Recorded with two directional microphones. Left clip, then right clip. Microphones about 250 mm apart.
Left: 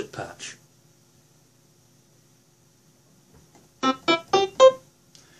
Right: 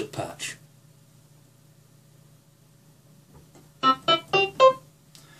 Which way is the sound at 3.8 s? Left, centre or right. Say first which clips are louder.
Right 2 dB; left.